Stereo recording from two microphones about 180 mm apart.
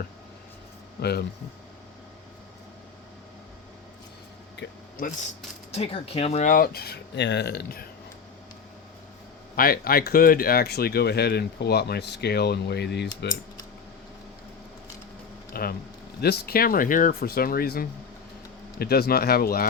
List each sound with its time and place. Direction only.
5.7 s speech: 35° left (ahead or behind); by 7.9 s 60° left (ahead or behind)
9.6 s speech: 55° left (ahead or behind)
15.6 s speech: 55° left (ahead or behind)